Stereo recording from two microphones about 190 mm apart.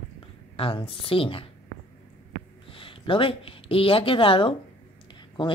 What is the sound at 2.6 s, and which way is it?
Speech, 30° left (ahead or behind).